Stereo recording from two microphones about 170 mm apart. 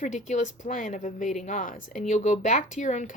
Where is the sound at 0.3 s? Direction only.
45° left (ahead or behind).